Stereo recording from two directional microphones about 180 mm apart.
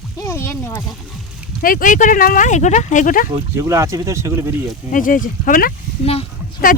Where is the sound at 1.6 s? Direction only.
50° left (ahead or behind).